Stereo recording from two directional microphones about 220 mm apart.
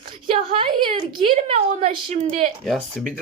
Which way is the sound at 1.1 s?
25° right (ahead or behind).